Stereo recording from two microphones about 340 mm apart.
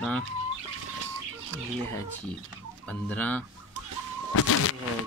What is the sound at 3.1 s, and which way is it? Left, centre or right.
Speech, centre.